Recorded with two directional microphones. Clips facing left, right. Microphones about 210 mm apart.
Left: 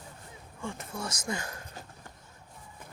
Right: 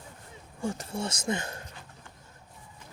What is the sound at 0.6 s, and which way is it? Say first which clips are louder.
Speech: right 6 dB; 40° right (ahead or behind).